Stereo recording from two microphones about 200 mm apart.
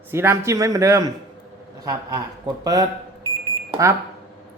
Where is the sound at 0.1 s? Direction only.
10° right (ahead or behind).